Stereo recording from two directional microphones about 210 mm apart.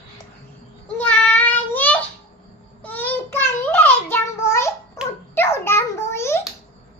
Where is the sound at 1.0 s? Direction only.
5° left (ahead or behind).